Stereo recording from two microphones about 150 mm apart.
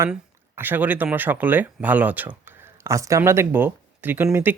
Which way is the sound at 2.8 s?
20° right (ahead or behind).